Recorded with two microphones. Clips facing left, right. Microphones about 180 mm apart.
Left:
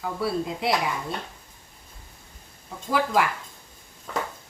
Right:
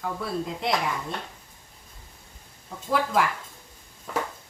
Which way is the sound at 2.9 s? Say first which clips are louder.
Left 1 dB; centre (ahead or behind).